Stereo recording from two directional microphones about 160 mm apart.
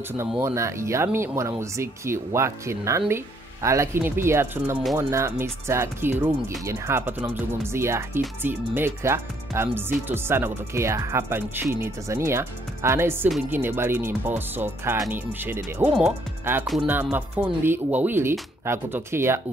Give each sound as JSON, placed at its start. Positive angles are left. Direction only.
{"t": 0.4, "sound": "speech", "side_deg": -15}